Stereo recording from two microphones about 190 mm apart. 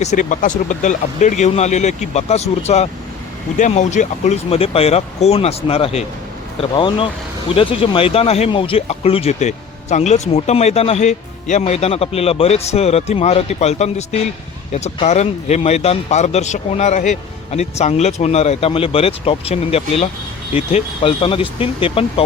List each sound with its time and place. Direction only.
0.0 s speech: 40° left (ahead or behind)